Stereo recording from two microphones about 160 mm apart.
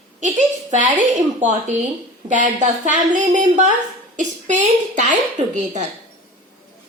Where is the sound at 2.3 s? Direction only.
50° right (ahead or behind).